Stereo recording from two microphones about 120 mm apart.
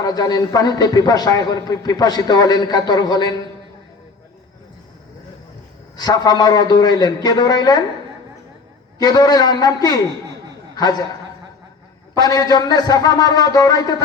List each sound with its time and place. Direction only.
0.0 s speech: 35° left (ahead or behind)
6.0 s speech: 35° left (ahead or behind)
9.0 s speech: 35° left (ahead or behind)
12.1 s speech: 30° left (ahead or behind)